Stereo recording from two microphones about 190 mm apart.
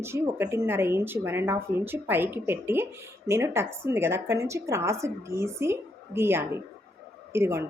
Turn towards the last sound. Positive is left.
turn(degrees=-15)  # may be behind; listen again after turning